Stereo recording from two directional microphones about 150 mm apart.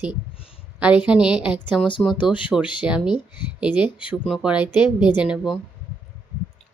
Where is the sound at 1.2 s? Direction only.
30° left (ahead or behind).